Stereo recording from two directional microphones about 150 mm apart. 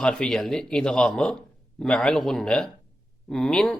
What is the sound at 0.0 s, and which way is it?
Speech, 5° left (ahead or behind).